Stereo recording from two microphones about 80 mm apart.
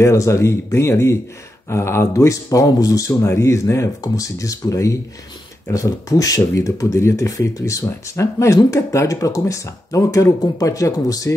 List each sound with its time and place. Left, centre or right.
0.0 s speech: left